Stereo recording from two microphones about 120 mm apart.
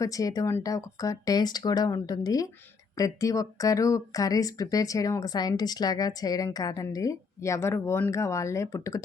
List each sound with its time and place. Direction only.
0.0 s speech: 30° left (ahead or behind)